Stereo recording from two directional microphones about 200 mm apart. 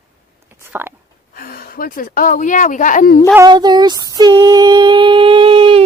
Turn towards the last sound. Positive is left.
turn(degrees=-25)  # may be behind; listen again after turning